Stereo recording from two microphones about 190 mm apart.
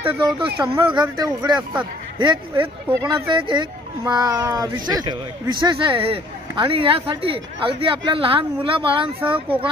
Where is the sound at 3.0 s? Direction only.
25° right (ahead or behind).